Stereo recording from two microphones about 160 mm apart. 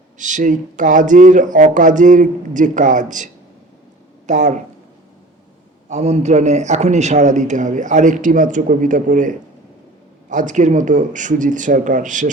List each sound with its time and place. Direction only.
0.2 s a man's voice: 50° right (ahead or behind)
4.3 s a man's voice: 50° right (ahead or behind)
5.9 s a man's voice: 45° right (ahead or behind)